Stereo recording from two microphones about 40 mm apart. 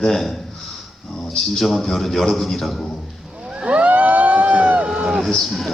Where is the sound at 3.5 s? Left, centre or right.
Right.